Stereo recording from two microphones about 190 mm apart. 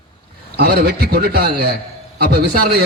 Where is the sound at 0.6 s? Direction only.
55° right (ahead or behind).